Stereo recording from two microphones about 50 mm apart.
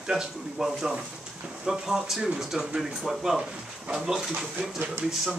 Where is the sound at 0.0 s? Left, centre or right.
Centre.